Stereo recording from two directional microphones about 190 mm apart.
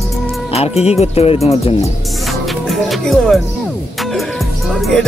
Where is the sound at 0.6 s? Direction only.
35° left (ahead or behind).